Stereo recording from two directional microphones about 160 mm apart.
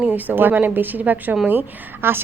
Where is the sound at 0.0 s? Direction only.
10° right (ahead or behind).